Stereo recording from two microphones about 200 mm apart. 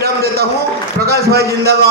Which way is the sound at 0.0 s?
50° right (ahead or behind).